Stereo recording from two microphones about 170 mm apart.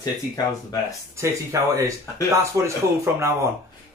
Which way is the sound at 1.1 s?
15° right (ahead or behind).